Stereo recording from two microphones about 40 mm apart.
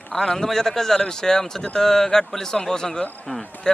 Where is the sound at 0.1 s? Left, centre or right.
Centre.